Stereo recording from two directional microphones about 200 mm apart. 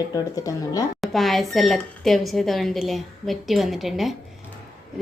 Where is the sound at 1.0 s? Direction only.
Centre (ahead or behind).